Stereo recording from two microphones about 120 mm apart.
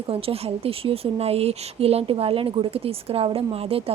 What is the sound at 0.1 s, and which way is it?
A woman's voice, 55° right (ahead or behind).